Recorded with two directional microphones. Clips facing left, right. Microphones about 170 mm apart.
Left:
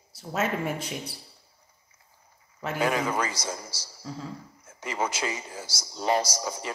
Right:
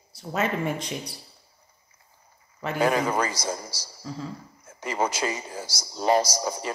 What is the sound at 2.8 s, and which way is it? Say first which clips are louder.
A man's voice: right 3 dB; 40° right (ahead or behind).